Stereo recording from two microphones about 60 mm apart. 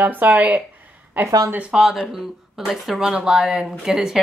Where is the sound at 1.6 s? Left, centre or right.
Centre.